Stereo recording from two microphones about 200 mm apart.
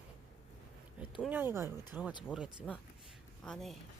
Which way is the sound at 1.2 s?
10° right (ahead or behind).